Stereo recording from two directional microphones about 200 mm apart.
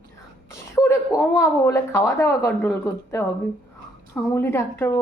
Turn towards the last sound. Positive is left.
turn(degrees=15)  # may be behind; listen again after turning